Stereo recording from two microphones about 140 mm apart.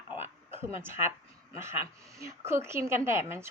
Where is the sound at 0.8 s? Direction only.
15° right (ahead or behind).